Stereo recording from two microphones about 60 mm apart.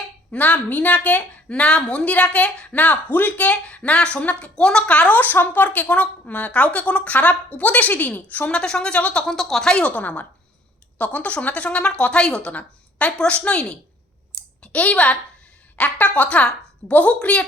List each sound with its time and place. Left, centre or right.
0.3 s a woman's voice: left
8.5 s a woman's voice: centre
9.2 s a woman's voice: centre
14.3 s a sound: centre
15.7 s a woman's voice: left